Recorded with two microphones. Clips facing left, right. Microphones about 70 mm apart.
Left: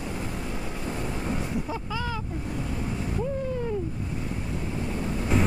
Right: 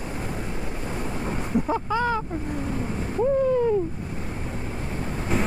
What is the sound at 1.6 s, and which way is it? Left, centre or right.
Speech, right.